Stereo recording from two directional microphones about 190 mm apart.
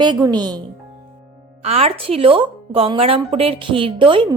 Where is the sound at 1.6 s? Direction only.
35° right (ahead or behind).